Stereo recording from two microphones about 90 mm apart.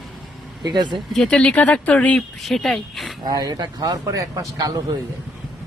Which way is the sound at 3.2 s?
45° right (ahead or behind).